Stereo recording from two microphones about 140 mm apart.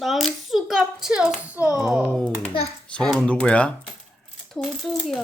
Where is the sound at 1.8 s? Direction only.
5° right (ahead or behind).